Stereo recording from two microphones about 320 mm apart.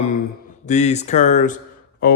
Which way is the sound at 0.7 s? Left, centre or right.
Left.